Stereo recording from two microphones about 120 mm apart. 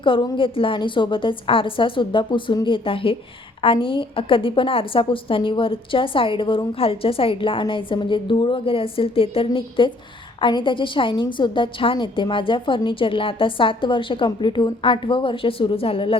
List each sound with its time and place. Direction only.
0.0 s a woman's voice: 45° left (ahead or behind)